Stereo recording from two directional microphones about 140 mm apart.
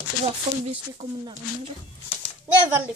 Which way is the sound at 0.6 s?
45° right (ahead or behind).